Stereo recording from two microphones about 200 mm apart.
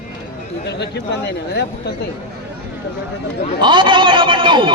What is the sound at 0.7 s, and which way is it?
Chatter, 55° left (ahead or behind).